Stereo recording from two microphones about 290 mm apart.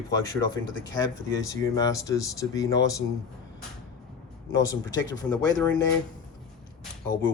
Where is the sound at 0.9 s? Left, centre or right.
Centre.